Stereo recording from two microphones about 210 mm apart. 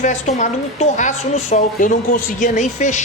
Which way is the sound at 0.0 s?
35° left (ahead or behind).